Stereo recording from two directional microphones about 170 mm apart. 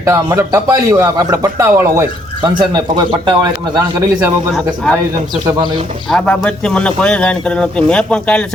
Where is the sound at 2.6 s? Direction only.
25° right (ahead or behind).